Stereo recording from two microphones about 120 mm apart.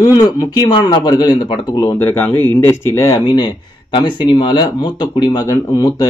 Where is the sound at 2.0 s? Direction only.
20° left (ahead or behind).